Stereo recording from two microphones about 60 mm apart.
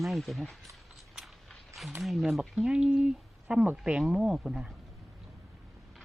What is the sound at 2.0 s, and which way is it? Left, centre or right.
Speech, centre.